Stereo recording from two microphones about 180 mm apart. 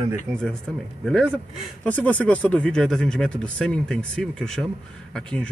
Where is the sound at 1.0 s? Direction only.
5° left (ahead or behind).